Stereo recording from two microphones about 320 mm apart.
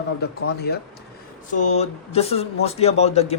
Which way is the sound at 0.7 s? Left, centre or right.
Left.